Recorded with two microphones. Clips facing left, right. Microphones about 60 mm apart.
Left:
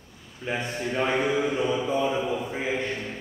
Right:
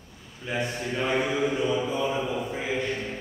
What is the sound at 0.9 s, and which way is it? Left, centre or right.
Mantra, centre.